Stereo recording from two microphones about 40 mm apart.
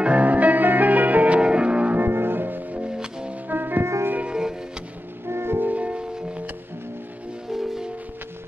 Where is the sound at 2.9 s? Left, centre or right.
Centre.